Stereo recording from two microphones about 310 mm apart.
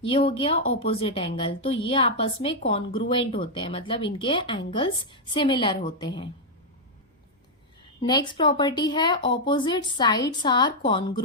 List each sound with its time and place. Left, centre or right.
0.0 s speech: centre
8.0 s speech: centre